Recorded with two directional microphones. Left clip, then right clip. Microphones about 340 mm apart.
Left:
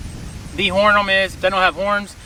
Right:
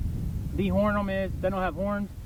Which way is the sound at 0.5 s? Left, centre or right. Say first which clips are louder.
Left 13 dB; centre.